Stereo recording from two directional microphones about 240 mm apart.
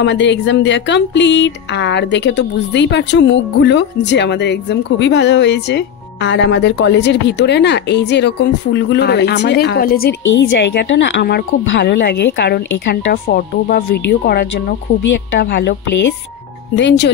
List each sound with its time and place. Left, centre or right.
0.0 s speech: left
16.7 s speech: left